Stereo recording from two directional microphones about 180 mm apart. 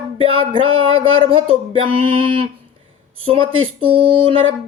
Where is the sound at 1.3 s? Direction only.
30° right (ahead or behind).